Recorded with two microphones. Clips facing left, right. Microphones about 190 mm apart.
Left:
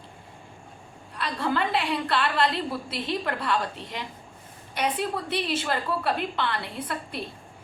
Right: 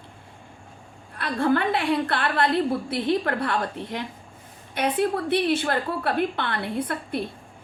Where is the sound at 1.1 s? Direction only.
55° right (ahead or behind).